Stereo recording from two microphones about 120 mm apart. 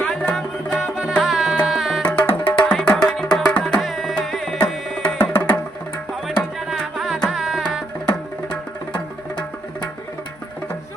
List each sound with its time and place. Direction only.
0.0 s music: 10° left (ahead or behind)
0.8 s music: 5° right (ahead or behind)
2.0 s music: 10° left (ahead or behind)
5.1 s music: 15° left (ahead or behind)
6.2 s music: centre (ahead or behind)
8.0 s music: 10° left (ahead or behind)